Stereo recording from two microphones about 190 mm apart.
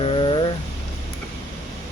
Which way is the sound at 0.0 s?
30° left (ahead or behind).